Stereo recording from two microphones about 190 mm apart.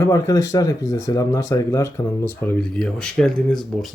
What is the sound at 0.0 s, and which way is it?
Speech, 15° left (ahead or behind).